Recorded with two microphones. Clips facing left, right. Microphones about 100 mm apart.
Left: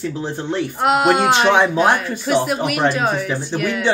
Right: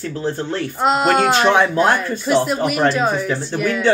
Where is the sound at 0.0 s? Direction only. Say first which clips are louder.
Right 1 dB; 15° left (ahead or behind).